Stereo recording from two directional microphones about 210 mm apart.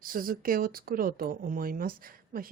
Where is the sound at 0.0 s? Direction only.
40° right (ahead or behind).